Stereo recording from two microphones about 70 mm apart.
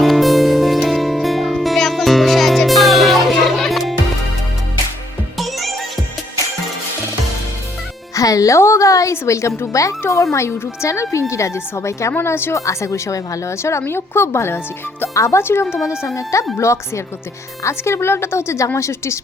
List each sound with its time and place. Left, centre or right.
0.0 s music: centre
5.4 s music: centre
8.1 s a woman's voice: left
15.9 s a woman's voice: left